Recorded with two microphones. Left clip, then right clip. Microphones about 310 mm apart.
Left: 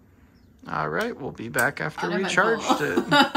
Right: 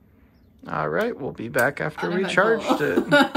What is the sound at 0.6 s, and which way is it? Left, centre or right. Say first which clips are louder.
Speech: right 2 dB; centre.